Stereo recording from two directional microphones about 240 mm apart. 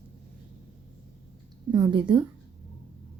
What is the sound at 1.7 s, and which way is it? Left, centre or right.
Speech, centre.